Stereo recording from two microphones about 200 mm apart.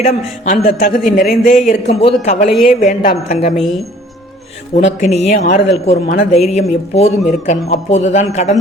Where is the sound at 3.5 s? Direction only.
Centre (ahead or behind).